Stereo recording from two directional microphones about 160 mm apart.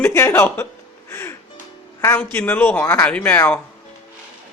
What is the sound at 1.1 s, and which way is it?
Music, 15° left (ahead or behind).